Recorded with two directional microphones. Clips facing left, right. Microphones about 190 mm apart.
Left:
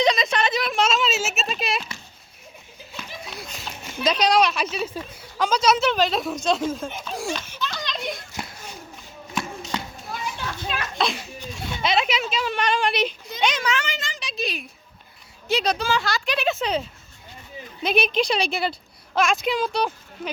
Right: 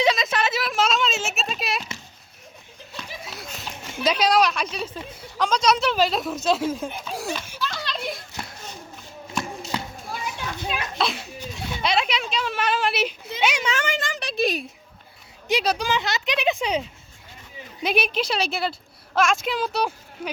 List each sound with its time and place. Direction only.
0.0 s a sound: 5° right (ahead or behind)
3.1 s children playing: centre (ahead or behind)
5.4 s speech: 5° left (ahead or behind)
10.3 s children playing: 15° right (ahead or behind)
10.9 s a child's voice: centre (ahead or behind)
13.7 s speech: 55° right (ahead or behind)
15.4 s speech: 10° right (ahead or behind)
15.9 s speech: 20° right (ahead or behind)
17.8 s a woman's voice: 10° right (ahead or behind)